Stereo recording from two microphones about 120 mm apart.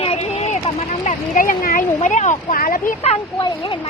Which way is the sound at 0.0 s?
60° left (ahead or behind).